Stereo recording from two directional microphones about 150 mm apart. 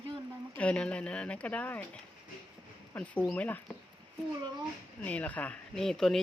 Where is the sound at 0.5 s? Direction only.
10° left (ahead or behind).